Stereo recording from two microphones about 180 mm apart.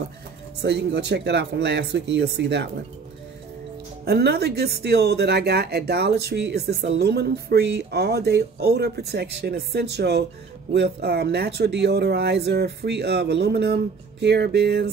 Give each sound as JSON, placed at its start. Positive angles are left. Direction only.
{"t": 0.6, "sound": "speech", "side_deg": -70}
{"t": 4.0, "sound": "speech", "side_deg": -65}